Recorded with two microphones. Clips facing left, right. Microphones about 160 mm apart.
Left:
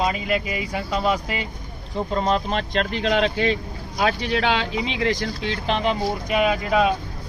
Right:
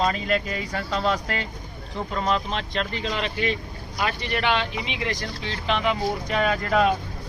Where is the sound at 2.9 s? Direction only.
85° left.